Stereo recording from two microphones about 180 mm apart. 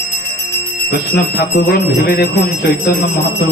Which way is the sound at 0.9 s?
60° left (ahead or behind).